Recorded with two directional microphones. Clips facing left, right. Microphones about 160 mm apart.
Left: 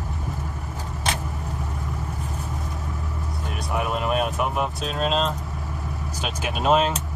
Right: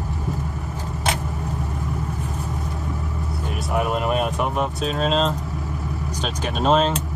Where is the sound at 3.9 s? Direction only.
Centre (ahead or behind).